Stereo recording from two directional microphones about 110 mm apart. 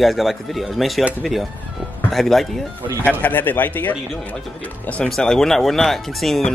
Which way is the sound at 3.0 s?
15° left (ahead or behind).